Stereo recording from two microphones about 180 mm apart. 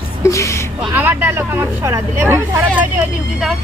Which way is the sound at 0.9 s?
10° right (ahead or behind).